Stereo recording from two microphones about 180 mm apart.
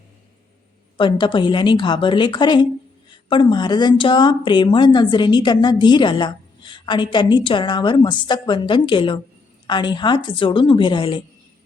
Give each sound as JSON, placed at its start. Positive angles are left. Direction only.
{"t": 0.9, "sound": "speech", "side_deg": 25}